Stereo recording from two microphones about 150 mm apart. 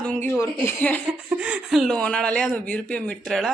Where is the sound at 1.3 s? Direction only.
5° right (ahead or behind).